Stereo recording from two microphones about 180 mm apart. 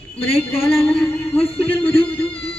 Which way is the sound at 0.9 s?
10° left (ahead or behind).